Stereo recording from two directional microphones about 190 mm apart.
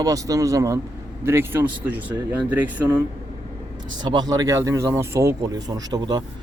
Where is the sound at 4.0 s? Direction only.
25° right (ahead or behind).